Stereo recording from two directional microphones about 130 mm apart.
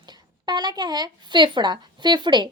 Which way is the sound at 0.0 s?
35° right (ahead or behind).